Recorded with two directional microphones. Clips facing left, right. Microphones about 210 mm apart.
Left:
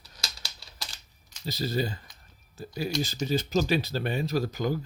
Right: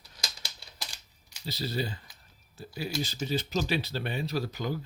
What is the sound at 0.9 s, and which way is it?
Typing, 10° right (ahead or behind).